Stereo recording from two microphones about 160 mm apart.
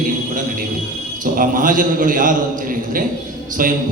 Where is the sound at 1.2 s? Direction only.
55° right (ahead or behind).